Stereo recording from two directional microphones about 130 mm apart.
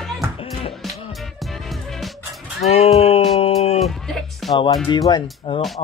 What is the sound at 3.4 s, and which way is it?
Music, 55° left (ahead or behind).